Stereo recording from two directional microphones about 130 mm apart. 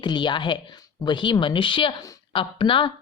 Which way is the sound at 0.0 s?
35° left (ahead or behind).